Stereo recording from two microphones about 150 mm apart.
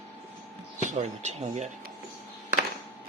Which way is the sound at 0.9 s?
50° right (ahead or behind).